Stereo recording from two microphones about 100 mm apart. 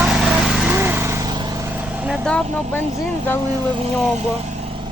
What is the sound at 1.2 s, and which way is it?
Vehicle, 45° right (ahead or behind).